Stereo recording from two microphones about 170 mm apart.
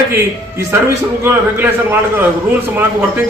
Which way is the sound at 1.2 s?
15° right (ahead or behind).